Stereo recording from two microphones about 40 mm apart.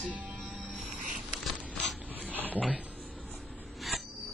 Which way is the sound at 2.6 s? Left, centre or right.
Right.